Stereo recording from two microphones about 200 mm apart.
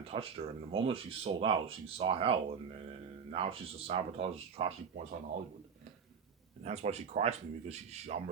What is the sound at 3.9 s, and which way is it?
Speech, 25° right (ahead or behind).